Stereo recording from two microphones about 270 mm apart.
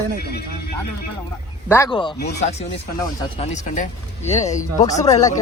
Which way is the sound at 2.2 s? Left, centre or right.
Left.